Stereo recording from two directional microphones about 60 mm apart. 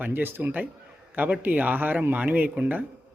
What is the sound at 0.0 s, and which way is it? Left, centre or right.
Speech, right.